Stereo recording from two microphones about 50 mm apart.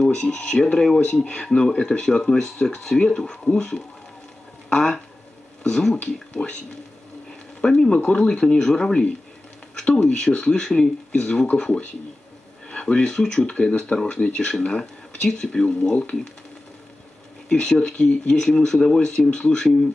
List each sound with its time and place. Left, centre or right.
0.0 s speech: centre
5.6 s speech: centre
6.4 s speech: left
7.6 s speech: centre
17.5 s speech: left